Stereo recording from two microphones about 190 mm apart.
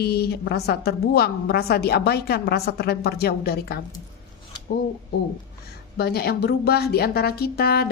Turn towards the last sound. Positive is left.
turn(degrees=55)  # may be behind; listen again after turning